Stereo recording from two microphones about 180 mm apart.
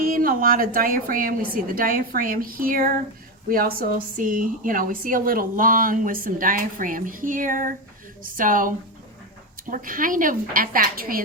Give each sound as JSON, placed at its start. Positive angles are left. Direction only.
{"t": 0.0, "sound": "speech", "side_deg": -50}